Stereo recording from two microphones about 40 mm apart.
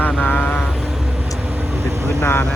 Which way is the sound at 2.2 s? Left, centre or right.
Left.